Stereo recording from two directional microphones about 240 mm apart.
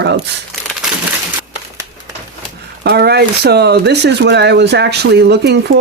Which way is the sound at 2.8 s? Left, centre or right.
Right.